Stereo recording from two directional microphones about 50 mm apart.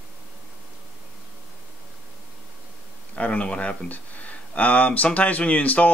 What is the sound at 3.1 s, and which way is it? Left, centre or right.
Speech, left.